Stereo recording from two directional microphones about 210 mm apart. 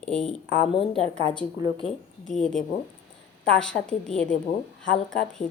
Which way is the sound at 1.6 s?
20° right (ahead or behind).